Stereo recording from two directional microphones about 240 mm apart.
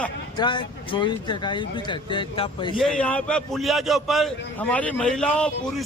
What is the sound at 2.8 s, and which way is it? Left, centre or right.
A man's voice, centre.